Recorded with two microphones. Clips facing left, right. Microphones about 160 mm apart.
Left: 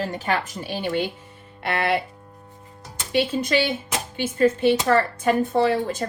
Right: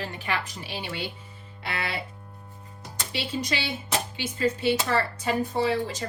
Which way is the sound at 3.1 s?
50° left (ahead or behind).